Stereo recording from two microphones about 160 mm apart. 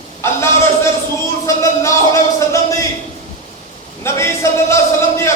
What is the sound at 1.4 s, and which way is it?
Speech, 20° left (ahead or behind).